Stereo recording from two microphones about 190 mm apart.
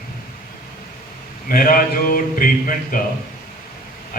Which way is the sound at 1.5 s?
50° left (ahead or behind).